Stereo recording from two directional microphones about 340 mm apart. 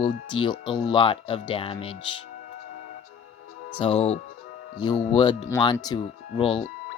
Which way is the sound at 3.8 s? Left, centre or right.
Centre.